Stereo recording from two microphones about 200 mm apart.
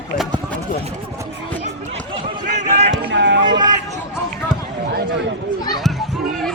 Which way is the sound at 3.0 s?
60° right (ahead or behind).